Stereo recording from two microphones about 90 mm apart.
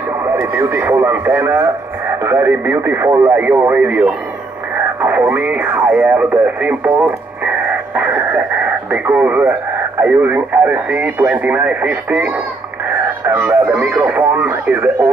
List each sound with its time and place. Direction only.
0.2 s speech: 25° right (ahead or behind)
3.3 s speech: 25° right (ahead or behind)
5.0 s speech: 25° right (ahead or behind)
13.3 s speech: 30° right (ahead or behind)